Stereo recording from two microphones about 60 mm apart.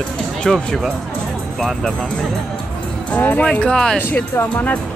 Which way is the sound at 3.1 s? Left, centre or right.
Left.